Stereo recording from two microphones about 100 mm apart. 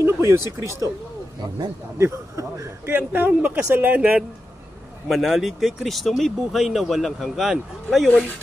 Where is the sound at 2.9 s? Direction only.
15° right (ahead or behind).